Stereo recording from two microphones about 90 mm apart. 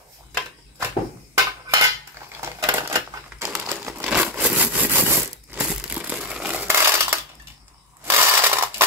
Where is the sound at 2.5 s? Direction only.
35° right (ahead or behind).